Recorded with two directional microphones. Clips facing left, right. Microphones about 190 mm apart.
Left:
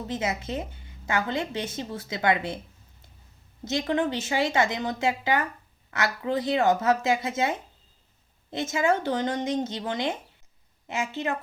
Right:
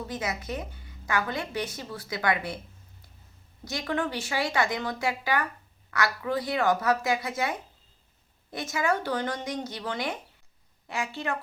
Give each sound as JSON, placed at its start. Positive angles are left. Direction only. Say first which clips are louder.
{"t": 0.1, "sound": "a woman's voice", "louder": "left 6 dB", "side_deg": 25}
{"t": 3.6, "sound": "a woman's voice", "louder": "left 4 dB", "side_deg": 20}